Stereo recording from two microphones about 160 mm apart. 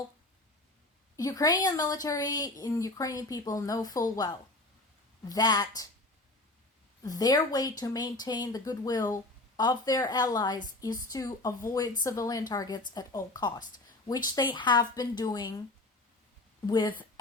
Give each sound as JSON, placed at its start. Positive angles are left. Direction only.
{"t": 1.1, "sound": "a woman's voice", "side_deg": 20}
{"t": 7.0, "sound": "a woman's voice", "side_deg": 25}
{"t": 16.6, "sound": "a woman's voice", "side_deg": 30}